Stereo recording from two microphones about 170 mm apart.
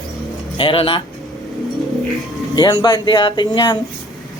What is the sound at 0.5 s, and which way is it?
Speech, 30° left (ahead or behind).